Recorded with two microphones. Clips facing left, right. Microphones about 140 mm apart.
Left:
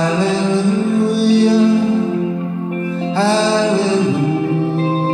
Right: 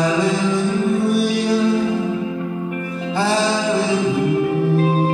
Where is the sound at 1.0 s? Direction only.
30° left (ahead or behind).